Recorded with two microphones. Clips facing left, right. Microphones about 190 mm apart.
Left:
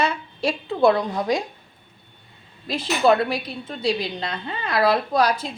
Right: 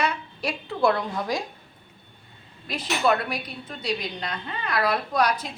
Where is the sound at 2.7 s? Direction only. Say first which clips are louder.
Left 5 dB; 30° left (ahead or behind).